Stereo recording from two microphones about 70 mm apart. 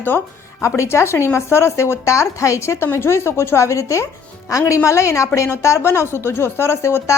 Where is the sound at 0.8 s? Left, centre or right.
Left.